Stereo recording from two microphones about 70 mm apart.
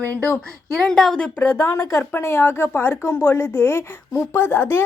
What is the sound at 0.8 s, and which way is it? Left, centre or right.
Speech, centre.